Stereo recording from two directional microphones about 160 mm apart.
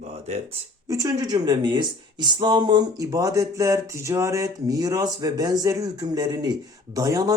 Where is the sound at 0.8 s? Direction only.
20° right (ahead or behind).